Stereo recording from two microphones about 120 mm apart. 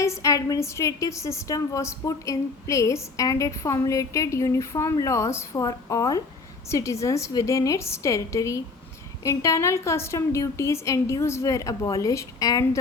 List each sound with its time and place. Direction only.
0.0 s a woman's voice: 25° left (ahead or behind)